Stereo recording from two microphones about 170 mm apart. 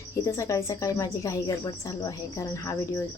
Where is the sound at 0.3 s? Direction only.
15° left (ahead or behind).